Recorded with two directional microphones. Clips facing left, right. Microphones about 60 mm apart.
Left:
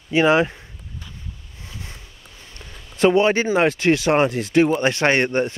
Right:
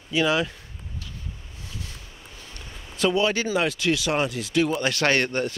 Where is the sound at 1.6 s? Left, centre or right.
Left.